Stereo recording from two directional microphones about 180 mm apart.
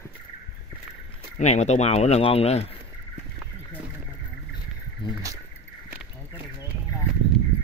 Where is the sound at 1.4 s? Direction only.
40° left (ahead or behind).